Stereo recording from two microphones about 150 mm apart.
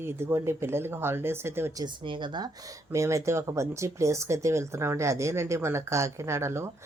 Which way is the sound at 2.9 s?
20° right (ahead or behind).